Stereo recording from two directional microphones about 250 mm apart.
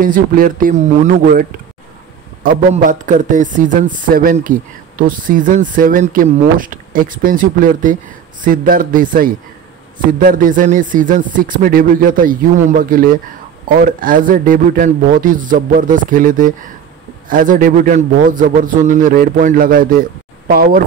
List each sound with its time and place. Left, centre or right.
0.0 s speech: right
2.7 s speech: right